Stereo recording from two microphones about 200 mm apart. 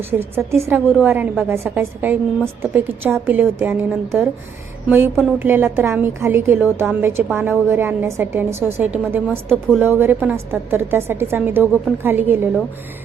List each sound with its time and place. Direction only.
0.1 s a woman's voice: 10° right (ahead or behind)